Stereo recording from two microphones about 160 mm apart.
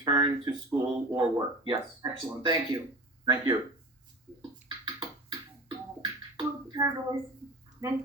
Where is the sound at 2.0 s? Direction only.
25° right (ahead or behind).